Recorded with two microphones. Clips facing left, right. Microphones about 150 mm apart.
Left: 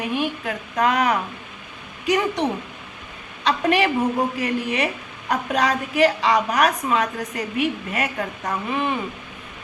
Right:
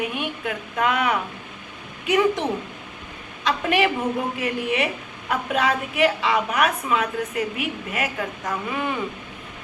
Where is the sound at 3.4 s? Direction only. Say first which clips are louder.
Left 2 dB; 35° left (ahead or behind).